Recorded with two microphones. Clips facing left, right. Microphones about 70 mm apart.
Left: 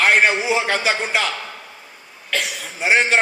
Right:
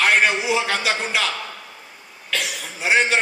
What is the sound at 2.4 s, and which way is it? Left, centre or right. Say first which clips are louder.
Speech: left 3 dB; left.